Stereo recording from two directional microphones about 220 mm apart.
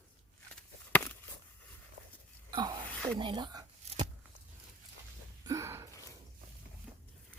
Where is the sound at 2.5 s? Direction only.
20° right (ahead or behind).